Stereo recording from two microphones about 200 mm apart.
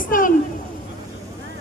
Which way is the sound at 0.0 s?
45° left (ahead or behind).